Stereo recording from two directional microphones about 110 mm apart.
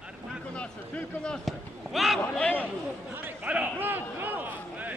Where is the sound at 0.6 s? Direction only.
10° left (ahead or behind).